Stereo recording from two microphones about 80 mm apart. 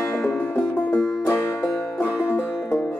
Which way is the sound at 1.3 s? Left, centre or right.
Left.